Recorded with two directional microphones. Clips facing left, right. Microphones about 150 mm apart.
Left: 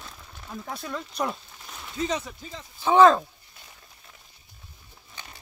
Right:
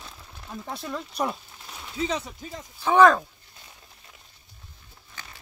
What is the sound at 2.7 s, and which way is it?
Speech, 15° left (ahead or behind).